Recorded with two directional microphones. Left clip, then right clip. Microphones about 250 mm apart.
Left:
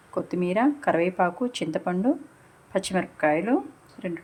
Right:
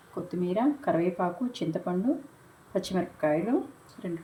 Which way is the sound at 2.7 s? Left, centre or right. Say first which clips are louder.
Left 4 dB; centre.